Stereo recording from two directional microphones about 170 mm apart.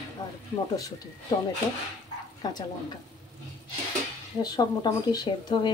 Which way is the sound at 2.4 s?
25° left (ahead or behind).